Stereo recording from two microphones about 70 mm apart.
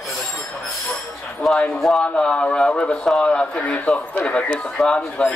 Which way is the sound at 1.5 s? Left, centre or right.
Centre.